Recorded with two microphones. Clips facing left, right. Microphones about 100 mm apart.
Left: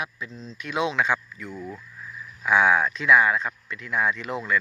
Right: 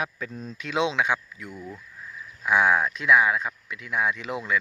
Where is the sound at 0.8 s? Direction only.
20° right (ahead or behind).